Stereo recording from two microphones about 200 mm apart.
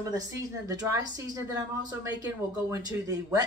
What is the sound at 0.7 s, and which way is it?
Speech, 15° right (ahead or behind).